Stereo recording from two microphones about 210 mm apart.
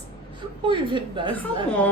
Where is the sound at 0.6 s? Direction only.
25° right (ahead or behind).